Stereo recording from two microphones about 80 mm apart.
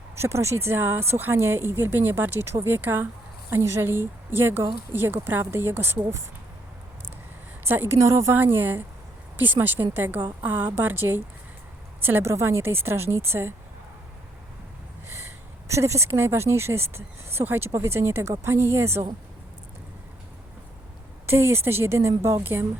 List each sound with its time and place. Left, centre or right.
0.2 s a woman's voice: right
7.6 s a woman's voice: right
7.9 s a woman's voice: right
15.6 s speech: right
21.2 s speech: right